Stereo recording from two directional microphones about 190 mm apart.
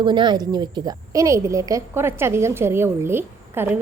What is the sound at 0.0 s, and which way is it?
A woman's voice, 25° right (ahead or behind).